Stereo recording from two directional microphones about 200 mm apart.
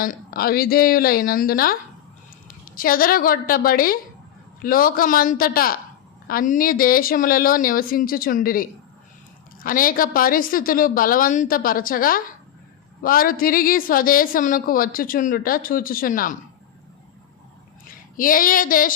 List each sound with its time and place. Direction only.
0.0 s a woman's voice: 45° left (ahead or behind)
18.2 s a woman's voice: 45° left (ahead or behind)